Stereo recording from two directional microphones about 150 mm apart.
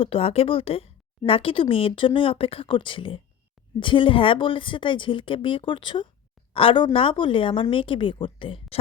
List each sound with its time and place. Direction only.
0.0 s speech: 40° left (ahead or behind)